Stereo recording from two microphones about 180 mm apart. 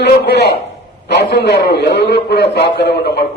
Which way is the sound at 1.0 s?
65° left (ahead or behind).